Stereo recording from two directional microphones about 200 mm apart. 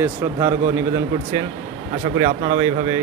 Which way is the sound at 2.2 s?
20° right (ahead or behind).